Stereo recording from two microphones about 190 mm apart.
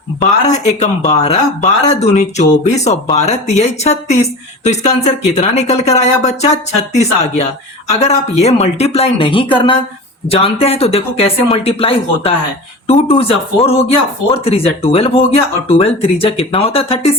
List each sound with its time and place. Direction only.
0.2 s speech: 35° left (ahead or behind)